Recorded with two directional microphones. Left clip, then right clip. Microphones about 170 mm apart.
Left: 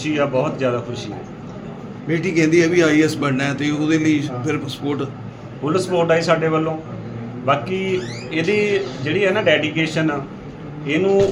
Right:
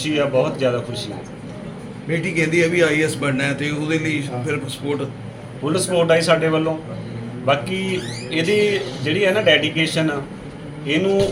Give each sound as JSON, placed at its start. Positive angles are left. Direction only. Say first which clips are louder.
{"t": 0.0, "sound": "speech", "louder": "right 1 dB", "side_deg": 0}
{"t": 2.0, "sound": "a man's voice", "louder": "left 3 dB", "side_deg": 65}
{"t": 5.6, "sound": "speech", "louder": "even", "side_deg": 5}